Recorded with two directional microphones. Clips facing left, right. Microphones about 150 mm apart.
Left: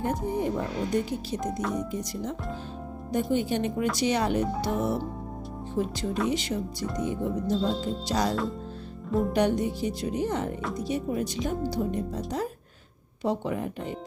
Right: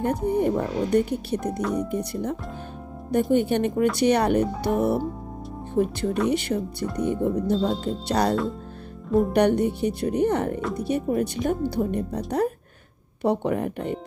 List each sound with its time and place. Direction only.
0.0 s speech: 60° right (ahead or behind)